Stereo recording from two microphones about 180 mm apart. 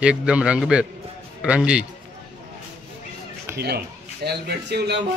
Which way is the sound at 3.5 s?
65° right (ahead or behind).